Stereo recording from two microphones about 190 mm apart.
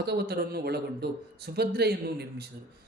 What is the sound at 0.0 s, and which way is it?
A man's voice, 60° right (ahead or behind).